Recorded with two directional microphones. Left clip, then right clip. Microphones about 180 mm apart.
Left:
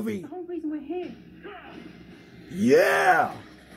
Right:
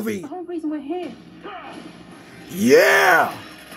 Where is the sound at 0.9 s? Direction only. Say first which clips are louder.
Right 5 dB; 45° right (ahead or behind).